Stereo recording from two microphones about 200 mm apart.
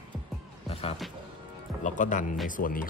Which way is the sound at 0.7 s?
30° left (ahead or behind).